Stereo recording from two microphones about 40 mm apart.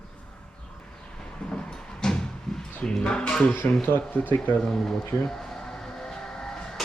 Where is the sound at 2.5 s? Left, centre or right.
Centre.